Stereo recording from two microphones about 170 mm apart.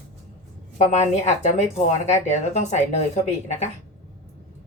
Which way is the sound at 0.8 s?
40° left (ahead or behind).